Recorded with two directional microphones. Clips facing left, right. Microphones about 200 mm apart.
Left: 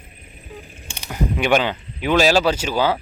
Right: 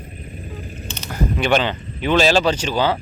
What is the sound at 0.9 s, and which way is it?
Speech, 10° left (ahead or behind).